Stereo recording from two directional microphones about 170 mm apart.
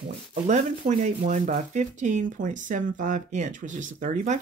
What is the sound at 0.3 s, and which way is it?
Speech, 45° right (ahead or behind).